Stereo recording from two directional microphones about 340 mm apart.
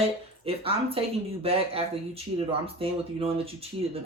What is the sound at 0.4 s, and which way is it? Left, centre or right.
Speech, centre.